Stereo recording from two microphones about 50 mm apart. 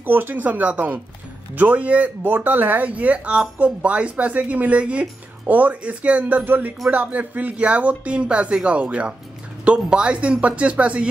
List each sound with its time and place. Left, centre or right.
0.0 s speech: right